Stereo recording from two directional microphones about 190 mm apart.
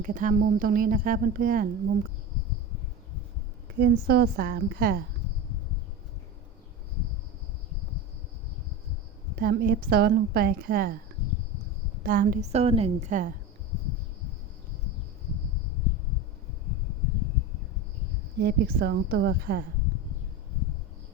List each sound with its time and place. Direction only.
0.0 s a woman's voice: 45° right (ahead or behind)
3.8 s a woman's voice: 55° right (ahead or behind)
9.4 s a woman's voice: 50° right (ahead or behind)
12.0 s a woman's voice: 45° right (ahead or behind)
18.3 s a woman's voice: 55° right (ahead or behind)